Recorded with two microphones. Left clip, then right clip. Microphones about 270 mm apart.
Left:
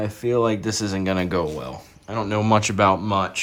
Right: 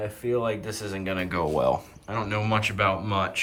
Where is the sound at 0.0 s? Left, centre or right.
Left.